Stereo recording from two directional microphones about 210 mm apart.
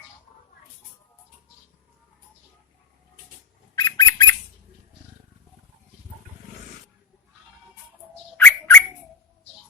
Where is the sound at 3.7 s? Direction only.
20° left (ahead or behind).